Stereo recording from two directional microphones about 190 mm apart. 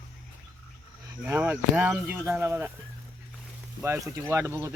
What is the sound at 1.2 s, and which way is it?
Speech, 10° right (ahead or behind).